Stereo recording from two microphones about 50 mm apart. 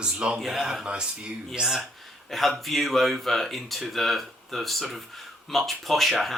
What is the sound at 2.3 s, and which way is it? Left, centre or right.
Speech, centre.